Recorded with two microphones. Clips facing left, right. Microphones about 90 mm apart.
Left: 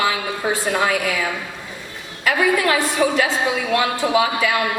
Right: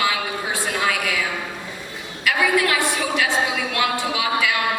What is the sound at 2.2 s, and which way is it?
A woman's voice, 35° left (ahead or behind).